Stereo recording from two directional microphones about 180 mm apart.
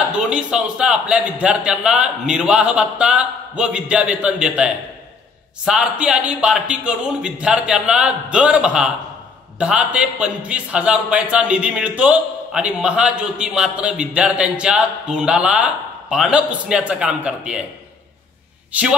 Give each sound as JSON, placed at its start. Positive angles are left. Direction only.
{"t": 0.1, "sound": "a man's voice", "side_deg": -5}
{"t": 18.7, "sound": "speech", "side_deg": -5}